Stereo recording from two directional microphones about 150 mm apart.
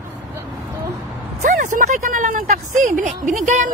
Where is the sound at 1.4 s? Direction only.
55° right (ahead or behind).